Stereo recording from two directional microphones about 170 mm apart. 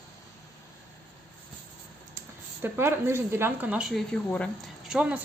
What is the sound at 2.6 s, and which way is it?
Speech, 10° right (ahead or behind).